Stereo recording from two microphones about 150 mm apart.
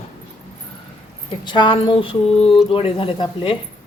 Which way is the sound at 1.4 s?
30° left (ahead or behind).